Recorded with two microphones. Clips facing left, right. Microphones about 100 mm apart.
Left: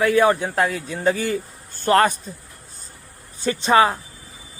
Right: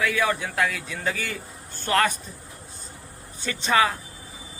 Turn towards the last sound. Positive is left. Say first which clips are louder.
# left 6 dB
turn(degrees=35)  # may be behind; listen again after turning